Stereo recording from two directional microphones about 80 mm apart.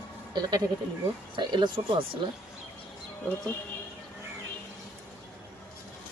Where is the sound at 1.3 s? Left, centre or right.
Right.